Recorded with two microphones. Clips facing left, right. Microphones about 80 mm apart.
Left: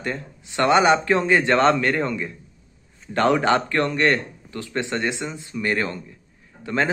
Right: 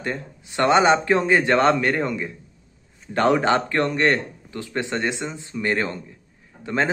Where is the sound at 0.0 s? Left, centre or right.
Right.